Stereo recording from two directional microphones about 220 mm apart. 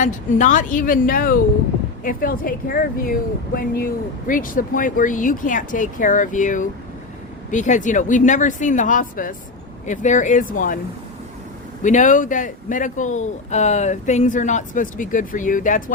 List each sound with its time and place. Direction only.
0.0 s speech: 35° left (ahead or behind)
11.8 s speech: 35° left (ahead or behind)